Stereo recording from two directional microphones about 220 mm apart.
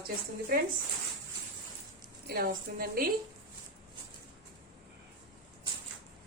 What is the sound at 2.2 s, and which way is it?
Speech, 45° right (ahead or behind).